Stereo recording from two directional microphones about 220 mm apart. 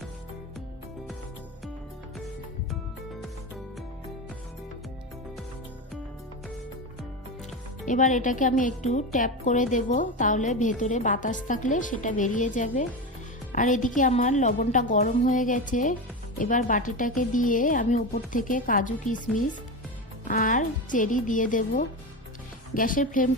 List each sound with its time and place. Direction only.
7.9 s a woman's voice: 35° left (ahead or behind)